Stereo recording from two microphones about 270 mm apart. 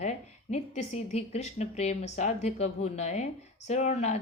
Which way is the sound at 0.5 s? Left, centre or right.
Left.